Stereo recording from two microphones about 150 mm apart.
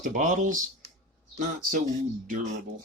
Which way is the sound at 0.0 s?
55° right (ahead or behind).